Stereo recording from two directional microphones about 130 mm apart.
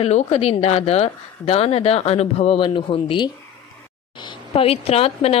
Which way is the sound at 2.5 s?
40° left (ahead or behind).